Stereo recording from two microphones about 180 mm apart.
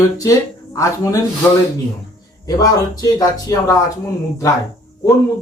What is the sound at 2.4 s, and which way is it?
Speech, 20° left (ahead or behind).